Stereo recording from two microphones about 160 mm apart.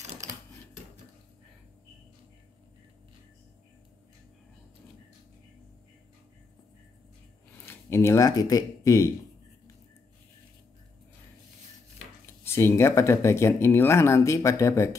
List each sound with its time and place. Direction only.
7.6 s speech: 15° left (ahead or behind)
12.4 s speech: 15° left (ahead or behind)